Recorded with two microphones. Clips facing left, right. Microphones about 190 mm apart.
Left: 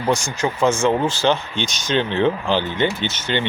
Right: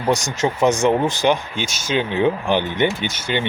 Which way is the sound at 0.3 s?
20° right (ahead or behind).